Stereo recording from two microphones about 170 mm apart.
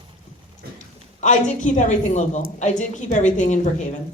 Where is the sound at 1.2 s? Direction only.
45° left (ahead or behind).